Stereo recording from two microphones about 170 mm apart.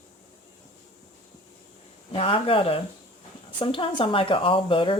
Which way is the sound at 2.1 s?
35° left (ahead or behind).